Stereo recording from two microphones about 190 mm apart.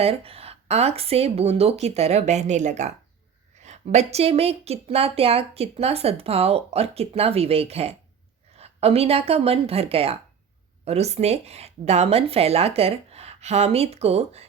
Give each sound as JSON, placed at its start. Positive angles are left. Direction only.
{"t": 0.0, "sound": "a woman's voice", "side_deg": -30}